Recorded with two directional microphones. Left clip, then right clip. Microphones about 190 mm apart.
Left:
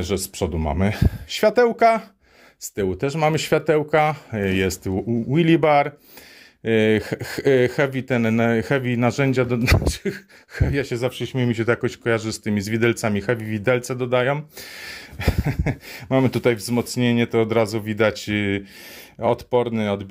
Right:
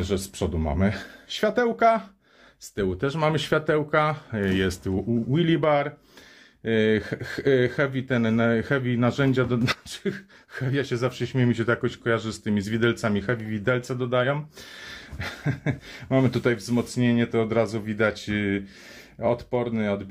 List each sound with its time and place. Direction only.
0.0 s speech: 35° left (ahead or behind)